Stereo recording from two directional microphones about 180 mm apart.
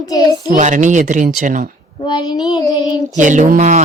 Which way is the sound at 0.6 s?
45° right (ahead or behind).